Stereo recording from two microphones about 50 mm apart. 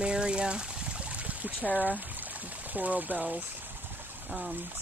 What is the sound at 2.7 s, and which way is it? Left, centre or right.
Speech, right.